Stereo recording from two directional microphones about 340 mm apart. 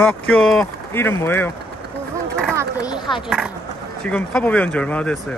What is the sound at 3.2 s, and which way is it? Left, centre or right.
Speech, centre.